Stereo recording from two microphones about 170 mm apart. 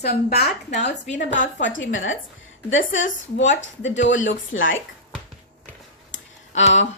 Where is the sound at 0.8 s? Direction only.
90° left.